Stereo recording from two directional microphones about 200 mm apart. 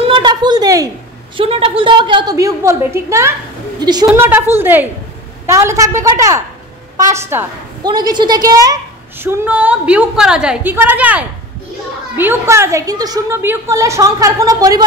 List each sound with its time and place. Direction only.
0.1 s a sound: 20° right (ahead or behind)
3.8 s a woman's voice: 20° right (ahead or behind)
4.1 s a woman's voice: 10° right (ahead or behind)